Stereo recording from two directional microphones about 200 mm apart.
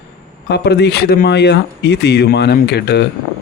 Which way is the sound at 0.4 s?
55° left (ahead or behind).